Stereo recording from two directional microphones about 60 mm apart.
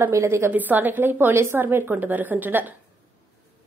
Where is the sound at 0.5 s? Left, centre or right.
Right.